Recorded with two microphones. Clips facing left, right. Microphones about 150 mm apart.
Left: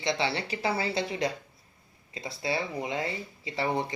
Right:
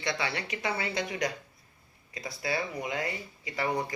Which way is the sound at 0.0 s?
25° left (ahead or behind).